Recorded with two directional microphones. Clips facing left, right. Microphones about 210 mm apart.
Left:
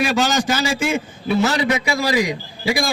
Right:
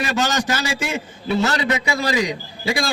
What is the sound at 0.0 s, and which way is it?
A man's voice, 15° left (ahead or behind).